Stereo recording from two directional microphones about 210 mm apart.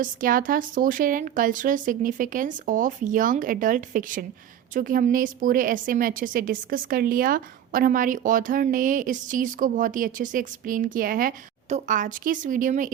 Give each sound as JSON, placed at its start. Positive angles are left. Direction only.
{"t": 0.0, "sound": "a woman's voice", "side_deg": -40}